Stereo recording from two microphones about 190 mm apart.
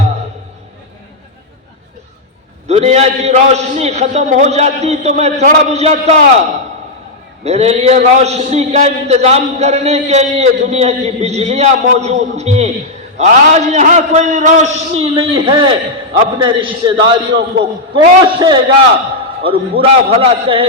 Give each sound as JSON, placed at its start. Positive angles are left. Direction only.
{"t": 2.6, "sound": "a man's voice", "side_deg": -35}
{"t": 7.4, "sound": "a man's voice", "side_deg": -35}